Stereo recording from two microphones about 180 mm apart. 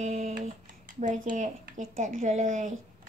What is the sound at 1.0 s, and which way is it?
A woman's voice, 45° right (ahead or behind).